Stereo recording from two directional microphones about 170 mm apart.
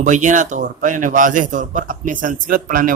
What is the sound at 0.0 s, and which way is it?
Speech, 45° right (ahead or behind).